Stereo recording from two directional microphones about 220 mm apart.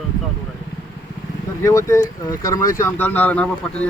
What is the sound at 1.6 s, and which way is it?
Speech, 15° left (ahead or behind).